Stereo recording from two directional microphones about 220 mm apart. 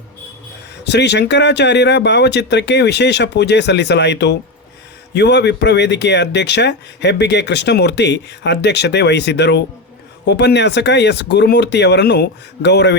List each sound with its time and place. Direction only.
0.9 s speech: 50° left (ahead or behind)